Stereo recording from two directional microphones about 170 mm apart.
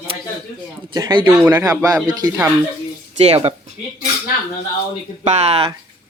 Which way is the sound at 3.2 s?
35° right (ahead or behind).